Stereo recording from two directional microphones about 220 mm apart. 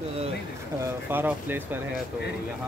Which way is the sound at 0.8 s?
10° right (ahead or behind).